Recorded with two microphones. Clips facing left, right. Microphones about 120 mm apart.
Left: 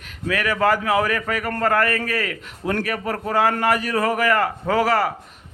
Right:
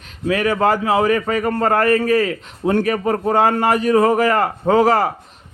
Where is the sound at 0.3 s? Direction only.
25° right (ahead or behind).